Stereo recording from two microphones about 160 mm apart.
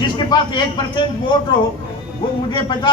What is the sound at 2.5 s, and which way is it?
Speech, 30° left (ahead or behind).